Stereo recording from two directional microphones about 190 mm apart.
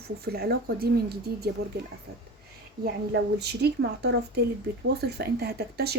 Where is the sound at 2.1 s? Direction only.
55° right (ahead or behind).